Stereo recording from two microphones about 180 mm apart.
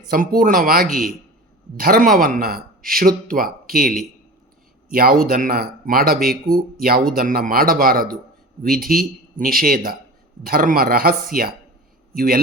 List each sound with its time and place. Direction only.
0.1 s a man's voice: 50° right (ahead or behind)